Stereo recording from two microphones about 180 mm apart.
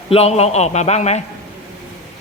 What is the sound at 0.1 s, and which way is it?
A man's voice, 35° left (ahead or behind).